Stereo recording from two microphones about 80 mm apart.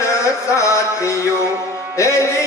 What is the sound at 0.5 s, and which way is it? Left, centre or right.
Music, left.